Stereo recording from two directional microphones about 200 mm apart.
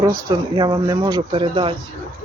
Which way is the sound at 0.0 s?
15° right (ahead or behind).